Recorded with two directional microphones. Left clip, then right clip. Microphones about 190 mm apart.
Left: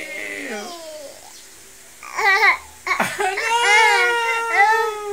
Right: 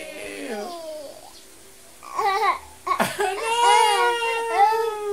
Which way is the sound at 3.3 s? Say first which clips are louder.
Left 2 dB; 10° right (ahead or behind).